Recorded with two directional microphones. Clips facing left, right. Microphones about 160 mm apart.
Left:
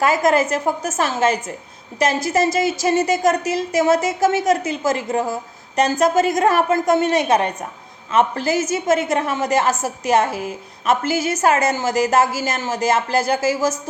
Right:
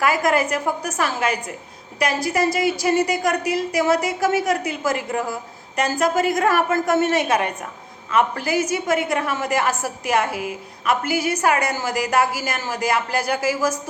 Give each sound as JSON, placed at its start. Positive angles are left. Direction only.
{"t": 0.0, "sound": "a woman's voice", "side_deg": 20}